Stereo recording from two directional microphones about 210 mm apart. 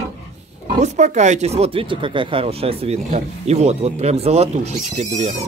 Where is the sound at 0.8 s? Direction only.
35° right (ahead or behind).